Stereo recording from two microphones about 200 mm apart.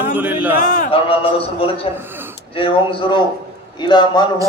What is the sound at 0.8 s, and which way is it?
A man's voice, 25° left (ahead or behind).